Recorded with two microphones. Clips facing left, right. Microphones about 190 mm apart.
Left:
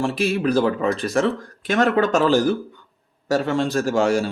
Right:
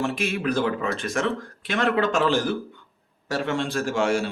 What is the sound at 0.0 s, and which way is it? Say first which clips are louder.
A man's voice: left 5 dB; 35° left (ahead or behind).